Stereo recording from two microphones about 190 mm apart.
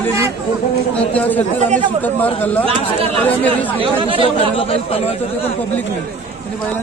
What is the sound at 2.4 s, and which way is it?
Speech, 10° left (ahead or behind).